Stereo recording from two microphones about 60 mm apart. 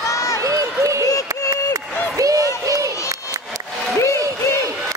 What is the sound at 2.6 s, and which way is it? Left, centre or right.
Crowd, right.